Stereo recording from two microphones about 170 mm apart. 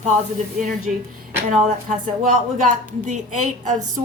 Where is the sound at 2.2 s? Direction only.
50° right (ahead or behind).